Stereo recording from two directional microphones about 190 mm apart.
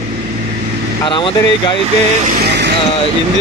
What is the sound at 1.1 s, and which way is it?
Speech, 25° left (ahead or behind).